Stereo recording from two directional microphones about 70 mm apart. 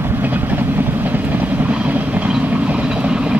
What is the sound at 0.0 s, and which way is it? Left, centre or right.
Vehicle, right.